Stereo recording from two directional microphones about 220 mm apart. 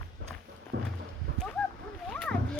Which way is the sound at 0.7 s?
55° right (ahead or behind).